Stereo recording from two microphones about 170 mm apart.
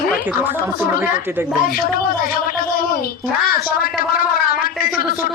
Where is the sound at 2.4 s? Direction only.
55° left (ahead or behind).